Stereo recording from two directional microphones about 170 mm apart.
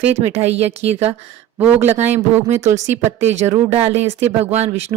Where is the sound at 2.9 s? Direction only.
40° right (ahead or behind).